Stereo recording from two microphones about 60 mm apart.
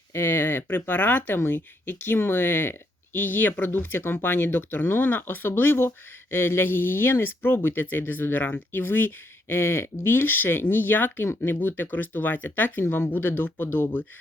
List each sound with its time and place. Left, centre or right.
0.1 s speech: left